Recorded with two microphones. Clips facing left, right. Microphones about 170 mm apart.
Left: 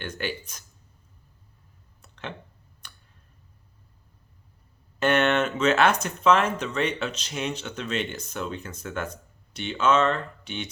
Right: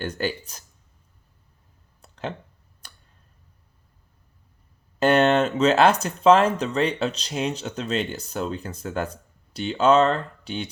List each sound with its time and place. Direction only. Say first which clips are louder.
0.0 s speech: right 5 dB; 35° right (ahead or behind)
2.0 s a sound: right 6 dB; 35° right (ahead or behind)
4.9 s speech: right 4 dB; 35° right (ahead or behind)